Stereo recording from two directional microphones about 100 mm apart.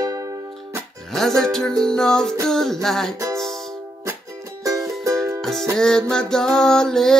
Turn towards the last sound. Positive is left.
turn(degrees=5)  # may be behind; listen again after turning